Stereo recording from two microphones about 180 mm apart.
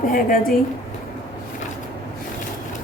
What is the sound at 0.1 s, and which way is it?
Speech, 50° left (ahead or behind).